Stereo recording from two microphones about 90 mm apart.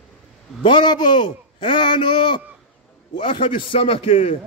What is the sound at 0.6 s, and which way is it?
A man's voice, 55° left (ahead or behind).